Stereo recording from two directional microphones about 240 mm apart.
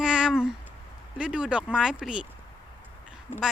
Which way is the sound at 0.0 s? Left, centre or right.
Centre.